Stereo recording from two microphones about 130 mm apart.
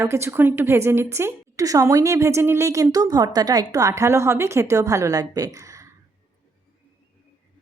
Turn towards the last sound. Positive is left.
turn(degrees=-25)  # may be behind; listen again after turning